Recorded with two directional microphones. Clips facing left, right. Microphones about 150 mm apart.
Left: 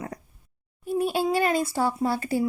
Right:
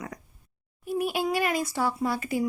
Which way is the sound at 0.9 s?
30° left (ahead or behind).